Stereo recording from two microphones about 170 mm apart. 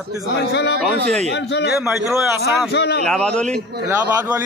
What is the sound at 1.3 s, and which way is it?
Speech, 85° left.